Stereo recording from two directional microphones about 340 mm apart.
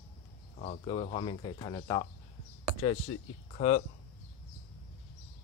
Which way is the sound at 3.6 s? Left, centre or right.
Centre.